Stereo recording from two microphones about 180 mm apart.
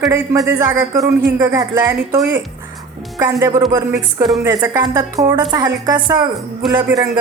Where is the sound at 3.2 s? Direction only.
20° right (ahead or behind).